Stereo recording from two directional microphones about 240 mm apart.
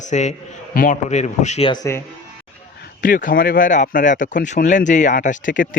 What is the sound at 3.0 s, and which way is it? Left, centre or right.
Speech, left.